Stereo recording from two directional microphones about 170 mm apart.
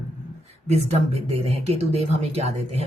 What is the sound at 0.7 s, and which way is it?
Speech, 40° right (ahead or behind).